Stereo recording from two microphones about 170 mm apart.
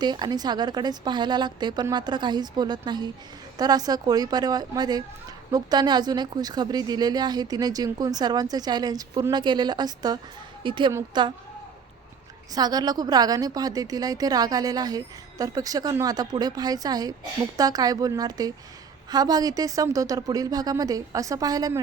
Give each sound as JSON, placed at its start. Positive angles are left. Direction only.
{"t": 0.0, "sound": "a woman's voice", "side_deg": -25}
{"t": 12.5, "sound": "speech", "side_deg": -25}